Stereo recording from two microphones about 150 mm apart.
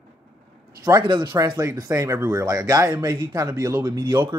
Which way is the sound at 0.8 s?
25° right (ahead or behind).